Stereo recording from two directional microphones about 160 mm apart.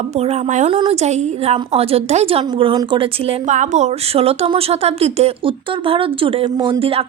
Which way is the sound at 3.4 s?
50° right (ahead or behind).